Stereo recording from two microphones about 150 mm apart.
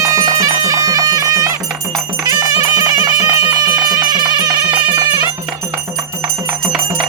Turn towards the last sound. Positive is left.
turn(degrees=-30)  # may be behind; listen again after turning